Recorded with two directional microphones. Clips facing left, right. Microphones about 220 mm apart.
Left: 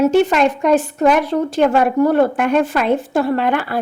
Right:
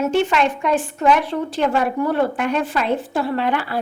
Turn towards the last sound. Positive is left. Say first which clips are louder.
# left 4 dB
turn(degrees=50)  # may be behind; listen again after turning